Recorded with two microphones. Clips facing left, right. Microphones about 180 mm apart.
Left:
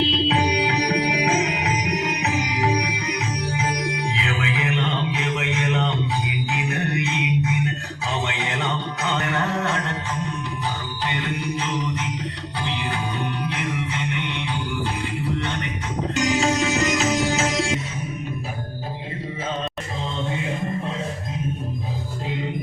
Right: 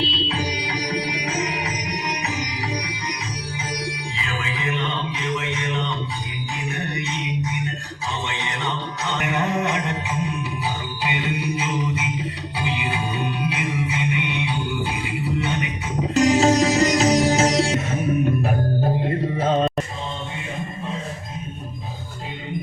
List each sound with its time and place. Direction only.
0.1 s music: 65° left (ahead or behind)
9.2 s music: 15° right (ahead or behind)
16.1 s music: 35° right (ahead or behind)
19.4 s music: 50° right (ahead or behind)